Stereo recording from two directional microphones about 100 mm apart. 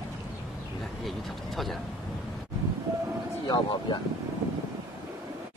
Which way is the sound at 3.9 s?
55° left (ahead or behind).